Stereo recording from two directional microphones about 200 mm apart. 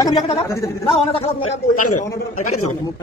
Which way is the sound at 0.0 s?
20° left (ahead or behind).